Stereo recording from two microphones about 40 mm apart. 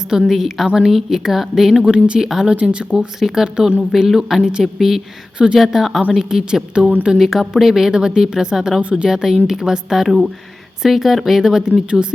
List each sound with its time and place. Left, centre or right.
0.3 s a woman's voice: centre
1.8 s speech: right
2.2 s a woman's voice: centre
2.5 s speech: right
3.2 s a woman's voice: centre
3.4 s speech: right
3.9 s a woman's voice: centre
7.2 s a woman's voice: centre; by 9.0 s right
9.0 s a woman's voice: centre
11.7 s speech: right